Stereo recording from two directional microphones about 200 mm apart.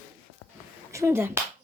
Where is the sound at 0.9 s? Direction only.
10° right (ahead or behind).